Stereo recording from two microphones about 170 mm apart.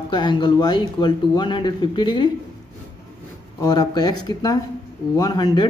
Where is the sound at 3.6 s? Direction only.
25° left (ahead or behind).